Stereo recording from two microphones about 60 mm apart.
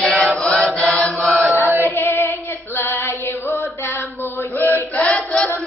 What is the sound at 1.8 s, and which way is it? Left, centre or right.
Female singing, left.